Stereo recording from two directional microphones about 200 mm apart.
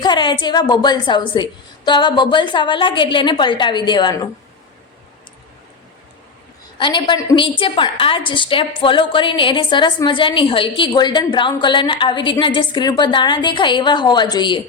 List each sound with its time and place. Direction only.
0.0 s a woman's voice: 20° left (ahead or behind)
6.7 s a woman's voice: 20° left (ahead or behind)